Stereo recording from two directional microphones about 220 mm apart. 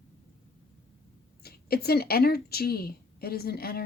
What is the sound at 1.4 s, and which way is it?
A woman's voice, 45° left (ahead or behind).